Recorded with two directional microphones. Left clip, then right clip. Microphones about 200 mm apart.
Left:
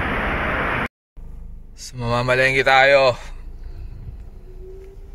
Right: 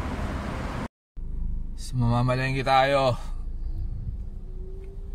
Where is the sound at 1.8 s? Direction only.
5° right (ahead or behind).